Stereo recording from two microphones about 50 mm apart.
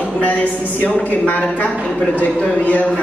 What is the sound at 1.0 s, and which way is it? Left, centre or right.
Speech, left.